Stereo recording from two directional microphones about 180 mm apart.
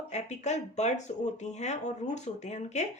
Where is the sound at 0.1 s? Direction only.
40° left (ahead or behind).